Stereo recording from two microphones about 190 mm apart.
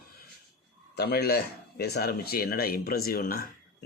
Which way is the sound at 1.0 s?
55° left (ahead or behind).